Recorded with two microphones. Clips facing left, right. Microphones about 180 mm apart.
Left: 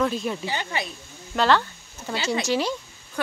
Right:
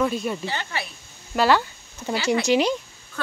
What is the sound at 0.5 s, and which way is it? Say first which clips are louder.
Speech: left 1 dB; 15° left (ahead or behind).